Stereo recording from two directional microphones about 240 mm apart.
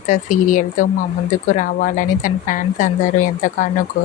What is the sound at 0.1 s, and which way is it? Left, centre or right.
Speech, left.